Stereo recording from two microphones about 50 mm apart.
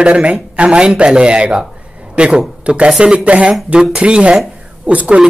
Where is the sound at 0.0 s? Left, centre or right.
Right.